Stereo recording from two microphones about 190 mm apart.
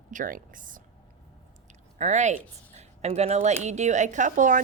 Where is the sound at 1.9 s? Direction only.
40° right (ahead or behind).